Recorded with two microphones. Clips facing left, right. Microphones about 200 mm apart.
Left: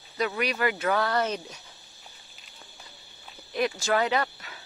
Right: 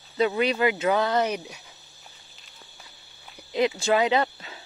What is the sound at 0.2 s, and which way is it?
Speech, 25° right (ahead or behind).